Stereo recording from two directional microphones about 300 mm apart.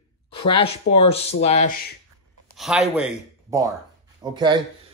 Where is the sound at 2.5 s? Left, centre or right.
Centre.